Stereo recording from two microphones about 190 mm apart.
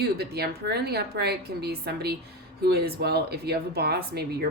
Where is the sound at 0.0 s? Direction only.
55° right (ahead or behind).